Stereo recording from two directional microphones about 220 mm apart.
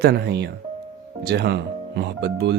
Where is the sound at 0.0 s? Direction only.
45° right (ahead or behind).